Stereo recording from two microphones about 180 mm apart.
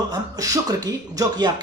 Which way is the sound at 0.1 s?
20° right (ahead or behind).